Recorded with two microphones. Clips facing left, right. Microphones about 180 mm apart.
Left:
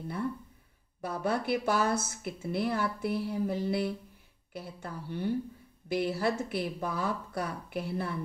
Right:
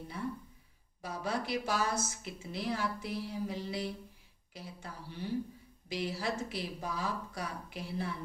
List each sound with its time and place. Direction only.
1.0 s a woman's voice: 60° left (ahead or behind)